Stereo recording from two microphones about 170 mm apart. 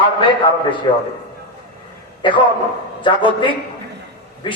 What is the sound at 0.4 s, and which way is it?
Speech, 30° left (ahead or behind).